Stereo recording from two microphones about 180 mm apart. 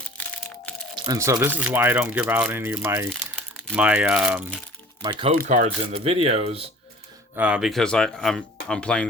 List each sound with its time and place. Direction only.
0.9 s speech: 20° right (ahead or behind)
3.1 s speech: centre (ahead or behind)
5.0 s speech: 30° right (ahead or behind)
7.3 s speech: 5° right (ahead or behind)